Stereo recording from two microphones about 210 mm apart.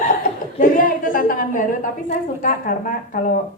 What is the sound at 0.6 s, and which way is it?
A woman's voice, 40° left (ahead or behind).